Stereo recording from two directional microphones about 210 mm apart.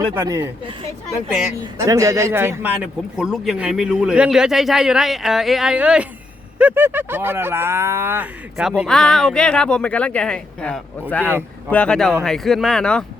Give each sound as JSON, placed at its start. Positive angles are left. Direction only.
{"t": 0.0, "sound": "a man's voice", "side_deg": -15}